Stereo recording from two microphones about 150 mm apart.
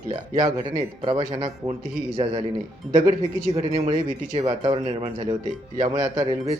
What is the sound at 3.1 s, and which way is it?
Speech, 40° right (ahead or behind).